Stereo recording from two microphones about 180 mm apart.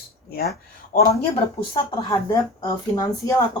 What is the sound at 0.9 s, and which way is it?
Speech, 50° left (ahead or behind).